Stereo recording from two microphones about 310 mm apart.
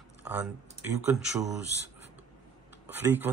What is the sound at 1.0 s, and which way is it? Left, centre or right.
Speech, centre.